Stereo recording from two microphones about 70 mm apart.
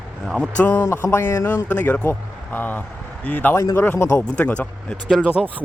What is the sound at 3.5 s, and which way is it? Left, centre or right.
Speech, left.